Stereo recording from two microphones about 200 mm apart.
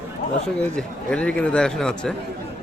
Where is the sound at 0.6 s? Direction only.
5° left (ahead or behind).